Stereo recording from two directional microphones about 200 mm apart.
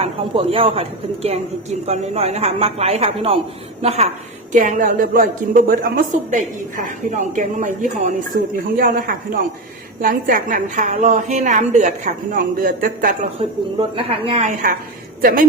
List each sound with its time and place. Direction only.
0.0 s a woman's voice: 30° right (ahead or behind)
13.4 s a woman's voice: 30° right (ahead or behind)